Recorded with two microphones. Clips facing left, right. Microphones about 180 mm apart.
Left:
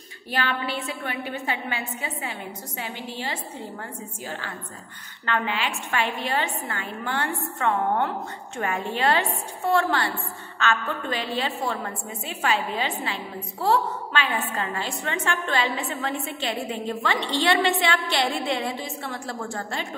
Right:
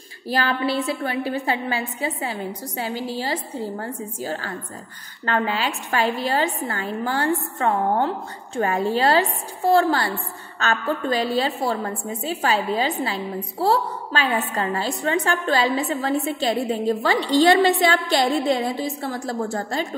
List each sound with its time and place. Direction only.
0.3 s a woman's voice: 35° right (ahead or behind)